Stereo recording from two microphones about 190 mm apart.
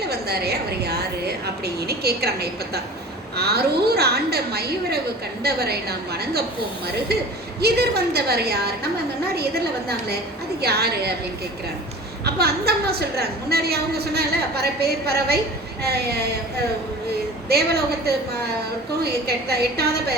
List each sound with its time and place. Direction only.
0.1 s a woman's voice: 55° right (ahead or behind)
12.2 s a woman's voice: 55° right (ahead or behind)
17.5 s a woman's voice: 55° right (ahead or behind)